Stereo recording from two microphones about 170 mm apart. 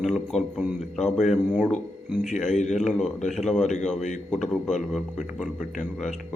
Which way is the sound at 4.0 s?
45° left (ahead or behind).